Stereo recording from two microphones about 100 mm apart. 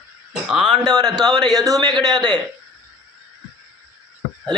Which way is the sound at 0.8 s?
40° right (ahead or behind).